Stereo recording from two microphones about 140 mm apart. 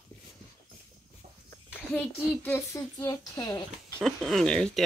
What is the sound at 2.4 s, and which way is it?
Speech, 15° left (ahead or behind).